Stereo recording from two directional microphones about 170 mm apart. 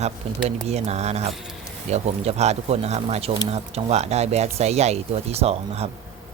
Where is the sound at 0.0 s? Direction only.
40° right (ahead or behind).